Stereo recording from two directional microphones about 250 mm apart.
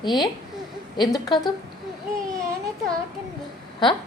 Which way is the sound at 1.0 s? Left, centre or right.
Centre.